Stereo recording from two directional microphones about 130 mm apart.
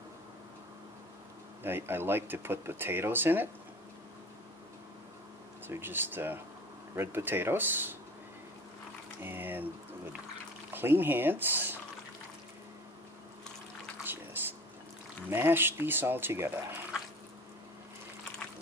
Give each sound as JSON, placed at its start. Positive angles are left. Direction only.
{"t": 1.6, "sound": "speech", "side_deg": -15}
{"t": 5.7, "sound": "speech", "side_deg": -15}
{"t": 9.2, "sound": "speech", "side_deg": -15}
{"t": 10.7, "sound": "speech", "side_deg": -15}
{"t": 14.3, "sound": "a sound", "side_deg": -15}
{"t": 15.2, "sound": "speech", "side_deg": -15}